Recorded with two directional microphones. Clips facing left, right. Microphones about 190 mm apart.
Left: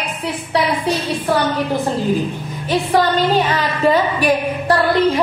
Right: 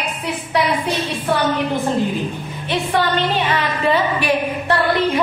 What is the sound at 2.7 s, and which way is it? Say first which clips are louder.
A woman's voice: left 3 dB; 40° left (ahead or behind).